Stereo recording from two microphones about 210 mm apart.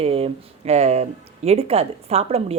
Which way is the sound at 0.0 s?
30° right (ahead or behind).